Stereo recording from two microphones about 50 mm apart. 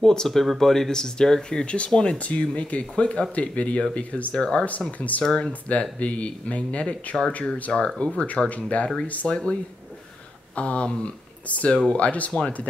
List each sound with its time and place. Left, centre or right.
0.0 s speech: centre
5.5 s speech: left
9.3 s speech: centre
12.3 s speech: centre